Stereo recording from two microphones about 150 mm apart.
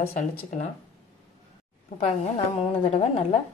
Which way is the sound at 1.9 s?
45° left (ahead or behind).